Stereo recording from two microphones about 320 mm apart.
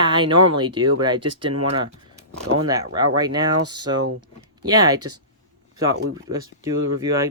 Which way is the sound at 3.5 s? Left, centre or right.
Right.